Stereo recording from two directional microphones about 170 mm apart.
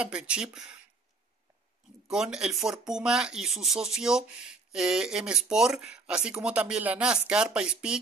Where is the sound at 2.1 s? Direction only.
5° right (ahead or behind).